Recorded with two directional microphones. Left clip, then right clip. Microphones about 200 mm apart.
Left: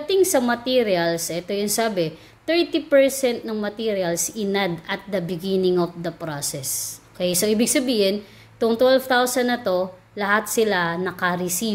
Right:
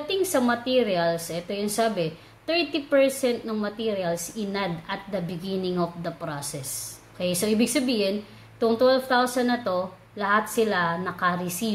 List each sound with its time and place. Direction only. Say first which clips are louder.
0.1 s a woman's voice: left 5 dB; 30° left (ahead or behind)